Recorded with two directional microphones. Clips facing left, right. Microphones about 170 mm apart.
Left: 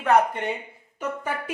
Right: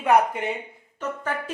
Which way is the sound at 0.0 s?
10° right (ahead or behind).